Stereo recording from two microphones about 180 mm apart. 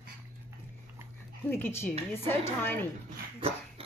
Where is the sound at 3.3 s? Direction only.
30° right (ahead or behind).